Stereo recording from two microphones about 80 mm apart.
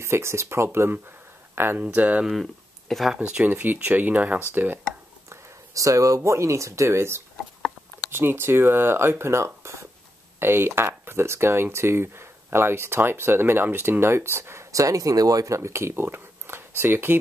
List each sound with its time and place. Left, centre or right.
0.0 s speech: right; by 2.2 s centre
2.9 s speech: centre
3.2 s speech: centre
5.3 s speech: right